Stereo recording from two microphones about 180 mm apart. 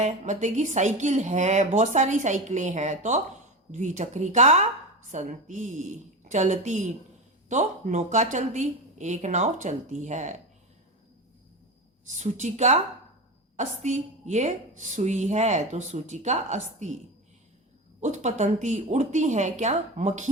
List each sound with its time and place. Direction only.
0.0 s a woman's voice: 40° right (ahead or behind)
12.0 s a woman's voice: 40° right (ahead or behind)
18.0 s a woman's voice: 40° right (ahead or behind)